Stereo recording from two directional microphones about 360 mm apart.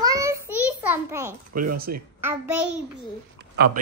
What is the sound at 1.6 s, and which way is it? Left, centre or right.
Speech, right.